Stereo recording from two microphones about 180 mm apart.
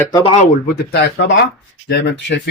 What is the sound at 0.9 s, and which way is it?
Speech, 65° left (ahead or behind).